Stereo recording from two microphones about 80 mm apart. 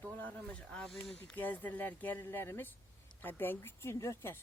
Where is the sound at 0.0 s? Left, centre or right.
Left.